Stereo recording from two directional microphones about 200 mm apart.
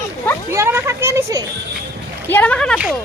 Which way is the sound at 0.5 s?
15° right (ahead or behind).